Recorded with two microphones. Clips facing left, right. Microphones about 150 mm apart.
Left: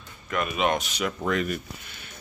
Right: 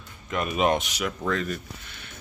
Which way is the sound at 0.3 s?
35° right (ahead or behind).